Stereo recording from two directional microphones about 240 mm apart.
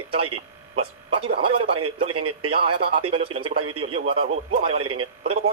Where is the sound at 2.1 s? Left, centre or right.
Right.